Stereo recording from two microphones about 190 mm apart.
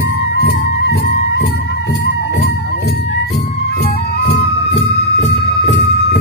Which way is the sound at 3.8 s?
65° left (ahead or behind).